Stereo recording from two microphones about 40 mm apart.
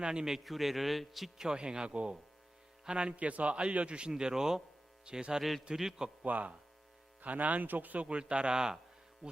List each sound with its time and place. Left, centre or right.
0.0 s speech: right
0.4 s a man's voice: centre
1.4 s speech: right
4.2 s a man's voice: centre
5.4 s a man's voice: centre
6.2 s speech: right
8.0 s speech: right